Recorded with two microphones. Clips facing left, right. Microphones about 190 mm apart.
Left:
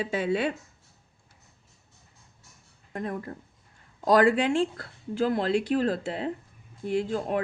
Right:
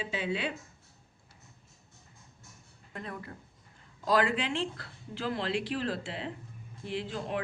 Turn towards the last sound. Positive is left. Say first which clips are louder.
# left 8 dB
turn(degrees=45)  # may be behind; listen again after turning